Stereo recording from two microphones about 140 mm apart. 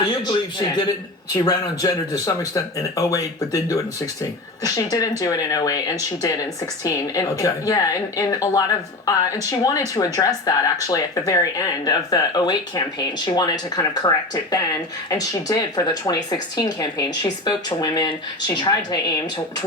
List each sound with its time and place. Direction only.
0.3 s a man's voice: 30° left (ahead or behind)